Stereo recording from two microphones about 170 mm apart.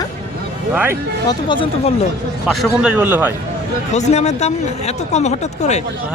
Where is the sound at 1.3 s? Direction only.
30° left (ahead or behind).